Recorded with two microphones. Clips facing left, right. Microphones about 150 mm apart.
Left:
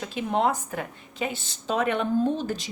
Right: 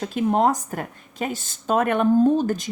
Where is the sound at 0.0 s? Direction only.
45° right (ahead or behind).